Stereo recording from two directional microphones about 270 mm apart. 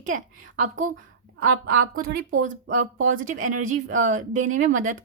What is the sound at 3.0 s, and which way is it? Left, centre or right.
Speech, right.